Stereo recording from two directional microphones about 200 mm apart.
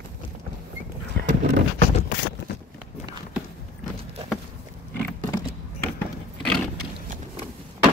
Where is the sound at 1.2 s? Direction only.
50° right (ahead or behind).